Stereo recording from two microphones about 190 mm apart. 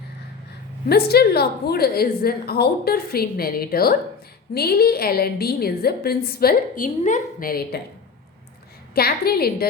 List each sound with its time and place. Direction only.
0.9 s a woman's voice: 55° left (ahead or behind)
9.0 s a woman's voice: 55° left (ahead or behind)